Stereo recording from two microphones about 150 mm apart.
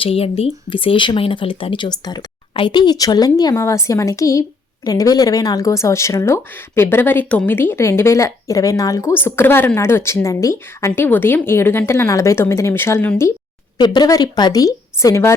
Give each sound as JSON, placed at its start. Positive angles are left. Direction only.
{"t": 0.0, "sound": "a woman's voice", "side_deg": 40}
{"t": 13.7, "sound": "speech", "side_deg": 30}